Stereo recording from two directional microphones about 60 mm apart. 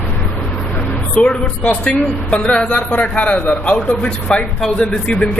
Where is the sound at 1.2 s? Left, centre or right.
Left.